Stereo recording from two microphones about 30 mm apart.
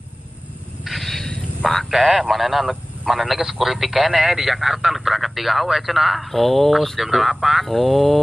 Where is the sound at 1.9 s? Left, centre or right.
Centre.